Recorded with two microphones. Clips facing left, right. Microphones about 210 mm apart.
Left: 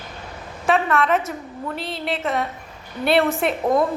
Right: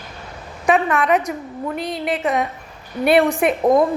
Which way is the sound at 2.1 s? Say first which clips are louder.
Right 3 dB; 15° right (ahead or behind).